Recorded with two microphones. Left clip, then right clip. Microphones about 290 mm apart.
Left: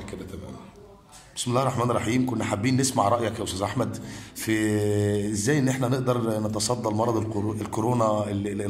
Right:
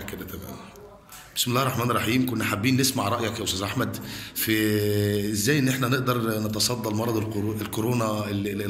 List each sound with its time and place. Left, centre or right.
1.3 s speech: centre